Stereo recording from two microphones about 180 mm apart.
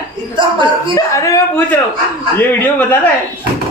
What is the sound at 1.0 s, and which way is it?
Speech, 15° left (ahead or behind).